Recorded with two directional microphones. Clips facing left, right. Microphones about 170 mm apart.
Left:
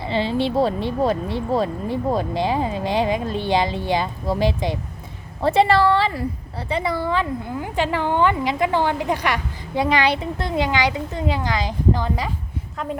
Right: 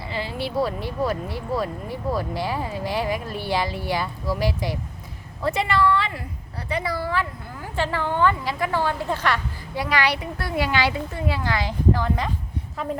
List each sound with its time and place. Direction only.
0.0 s a woman's voice: 25° left (ahead or behind)